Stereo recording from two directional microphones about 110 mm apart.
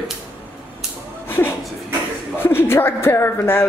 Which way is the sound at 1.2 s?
20° left (ahead or behind).